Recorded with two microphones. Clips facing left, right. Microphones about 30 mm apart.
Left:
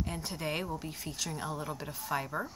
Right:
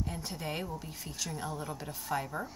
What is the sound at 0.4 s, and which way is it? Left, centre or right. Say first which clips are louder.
Speech: left 4 dB; centre.